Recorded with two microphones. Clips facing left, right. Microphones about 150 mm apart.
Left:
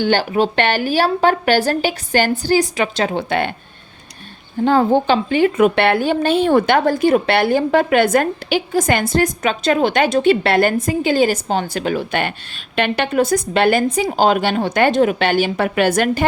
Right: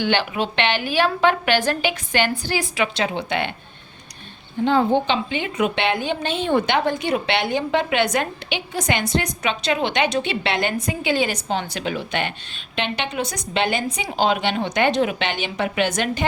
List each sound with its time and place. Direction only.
0.0 s a woman's voice: 40° left (ahead or behind)
4.6 s speech: 45° left (ahead or behind)